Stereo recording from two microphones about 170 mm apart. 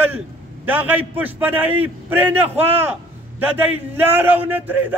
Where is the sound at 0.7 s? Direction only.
10° right (ahead or behind).